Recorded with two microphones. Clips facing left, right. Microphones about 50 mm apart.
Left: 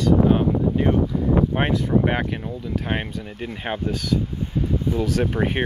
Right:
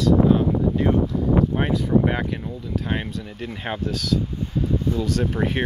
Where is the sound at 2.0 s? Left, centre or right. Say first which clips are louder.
Left 1 dB; left.